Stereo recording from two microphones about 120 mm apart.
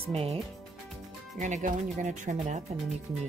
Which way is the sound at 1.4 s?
90° right.